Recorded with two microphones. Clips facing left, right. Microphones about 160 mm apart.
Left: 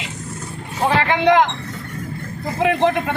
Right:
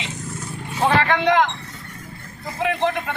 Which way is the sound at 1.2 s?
20° left (ahead or behind).